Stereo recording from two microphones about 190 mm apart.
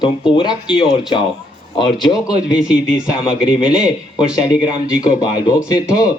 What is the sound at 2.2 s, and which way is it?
A man's voice, 5° right (ahead or behind).